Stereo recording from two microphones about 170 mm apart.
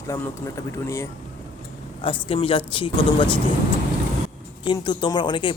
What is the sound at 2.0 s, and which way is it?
Speech, 30° left (ahead or behind).